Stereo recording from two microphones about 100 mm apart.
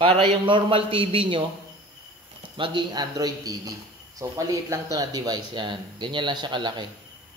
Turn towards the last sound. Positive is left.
turn(degrees=-50)  # may be behind; listen again after turning